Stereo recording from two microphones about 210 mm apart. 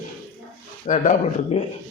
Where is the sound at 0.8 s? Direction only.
35° left (ahead or behind).